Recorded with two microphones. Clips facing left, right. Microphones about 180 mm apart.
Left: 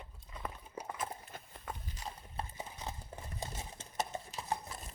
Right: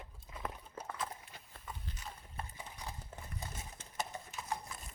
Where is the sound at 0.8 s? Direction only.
15° left (ahead or behind).